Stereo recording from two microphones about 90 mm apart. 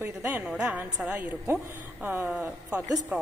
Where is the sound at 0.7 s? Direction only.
15° right (ahead or behind).